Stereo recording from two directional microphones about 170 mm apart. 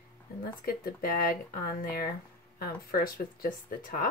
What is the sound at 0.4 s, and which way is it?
Speech, 60° left (ahead or behind).